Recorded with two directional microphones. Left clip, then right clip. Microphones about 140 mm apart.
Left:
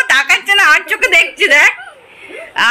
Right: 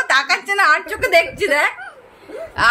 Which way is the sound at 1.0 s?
15° left (ahead or behind).